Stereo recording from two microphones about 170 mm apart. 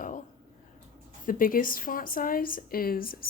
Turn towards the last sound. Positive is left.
turn(degrees=60)  # may be behind; listen again after turning